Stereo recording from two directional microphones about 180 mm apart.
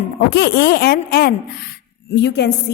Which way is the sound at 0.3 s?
65° left (ahead or behind).